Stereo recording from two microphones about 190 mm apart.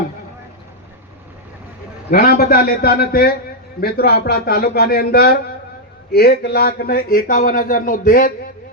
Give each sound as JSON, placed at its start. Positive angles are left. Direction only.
{"t": 2.0, "sound": "speech", "side_deg": 50}